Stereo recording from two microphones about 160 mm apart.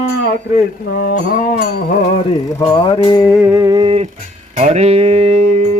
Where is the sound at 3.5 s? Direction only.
25° right (ahead or behind).